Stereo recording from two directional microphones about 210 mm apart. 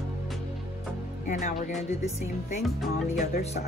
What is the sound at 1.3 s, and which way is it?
Speech, 35° left (ahead or behind).